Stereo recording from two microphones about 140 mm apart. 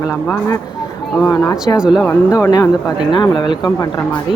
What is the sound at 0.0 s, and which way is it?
Speech, 20° left (ahead or behind).